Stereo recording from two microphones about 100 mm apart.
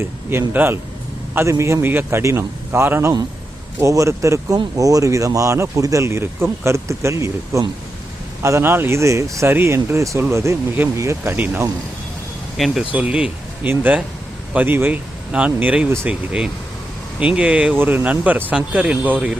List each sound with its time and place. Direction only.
0.0 s speech: 20° right (ahead or behind)
11.3 s speech: 15° right (ahead or behind)
12.5 s speech: centre (ahead or behind)
12.9 s speech: 15° right (ahead or behind)